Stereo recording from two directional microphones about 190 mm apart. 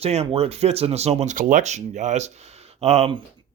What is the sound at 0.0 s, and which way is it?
Speech, 35° right (ahead or behind).